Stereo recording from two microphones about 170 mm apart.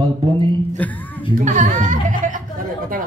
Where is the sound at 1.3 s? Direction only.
45° right (ahead or behind).